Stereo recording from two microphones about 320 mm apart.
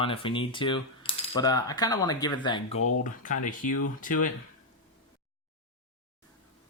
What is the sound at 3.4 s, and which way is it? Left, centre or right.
Speech, left.